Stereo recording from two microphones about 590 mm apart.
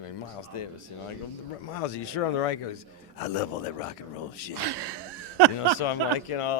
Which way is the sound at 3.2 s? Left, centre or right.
Left.